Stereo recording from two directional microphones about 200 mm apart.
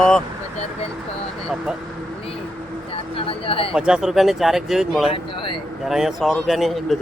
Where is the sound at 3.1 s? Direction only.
25° left (ahead or behind).